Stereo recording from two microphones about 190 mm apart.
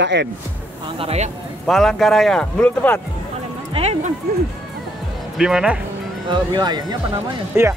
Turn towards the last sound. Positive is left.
turn(degrees=-10)  # may be behind; listen again after turning